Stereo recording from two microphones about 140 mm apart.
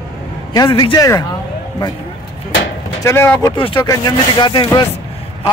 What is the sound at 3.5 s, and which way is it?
Speech, 35° left (ahead or behind).